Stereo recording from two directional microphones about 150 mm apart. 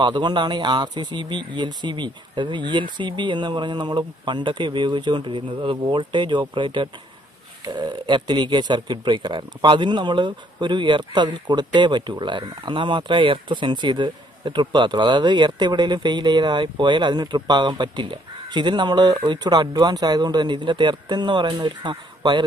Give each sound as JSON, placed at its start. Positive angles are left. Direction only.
{"t": 0.0, "sound": "speech", "side_deg": -30}